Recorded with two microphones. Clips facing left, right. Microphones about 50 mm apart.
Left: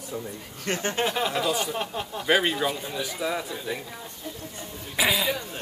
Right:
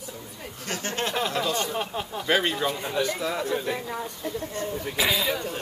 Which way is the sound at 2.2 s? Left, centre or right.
Centre.